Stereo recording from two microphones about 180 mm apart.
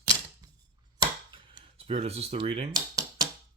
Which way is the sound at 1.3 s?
25° right (ahead or behind).